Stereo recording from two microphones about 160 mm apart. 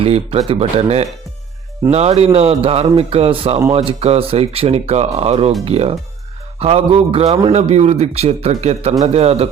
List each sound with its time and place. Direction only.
0.0 s speech: 40° right (ahead or behind)